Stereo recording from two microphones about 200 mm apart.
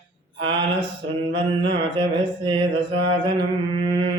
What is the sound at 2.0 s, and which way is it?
Mantra, 25° right (ahead or behind).